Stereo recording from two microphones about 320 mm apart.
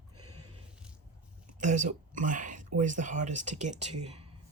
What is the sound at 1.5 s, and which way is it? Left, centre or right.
Speech, right.